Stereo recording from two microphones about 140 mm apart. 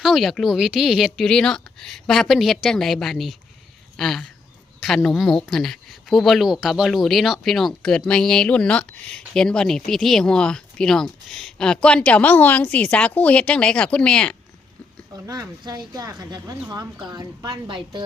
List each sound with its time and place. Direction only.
0.0 s speech: centre (ahead or behind)
15.1 s a woman's voice: 25° right (ahead or behind)